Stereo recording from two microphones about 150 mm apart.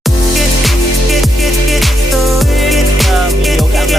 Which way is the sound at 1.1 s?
Centre (ahead or behind).